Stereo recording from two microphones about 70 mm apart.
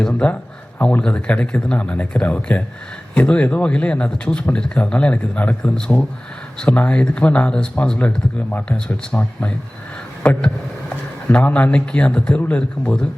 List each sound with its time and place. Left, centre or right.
0.1 s a man's voice: left
7.9 s a man's voice: left